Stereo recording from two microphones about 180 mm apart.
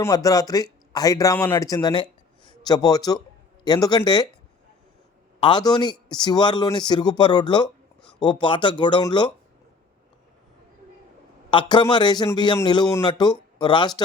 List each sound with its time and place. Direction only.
0.0 s speech: 20° left (ahead or behind)
5.4 s a man's voice: 25° left (ahead or behind)
11.5 s a man's voice: 25° left (ahead or behind)